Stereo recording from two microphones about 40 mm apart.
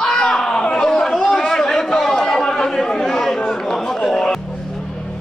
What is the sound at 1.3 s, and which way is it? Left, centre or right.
Chatter, centre.